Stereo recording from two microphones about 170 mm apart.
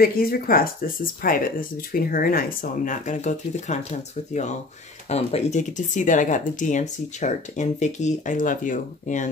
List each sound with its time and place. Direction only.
0.0 s speech: 60° left (ahead or behind); by 3.8 s 45° left (ahead or behind)
5.1 s speech: 40° left (ahead or behind)